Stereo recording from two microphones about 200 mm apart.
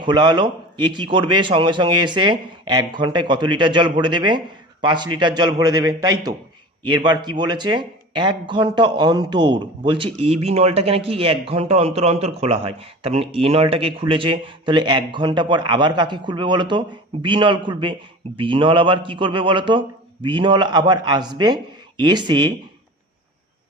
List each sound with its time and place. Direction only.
0.0 s speech: 20° right (ahead or behind)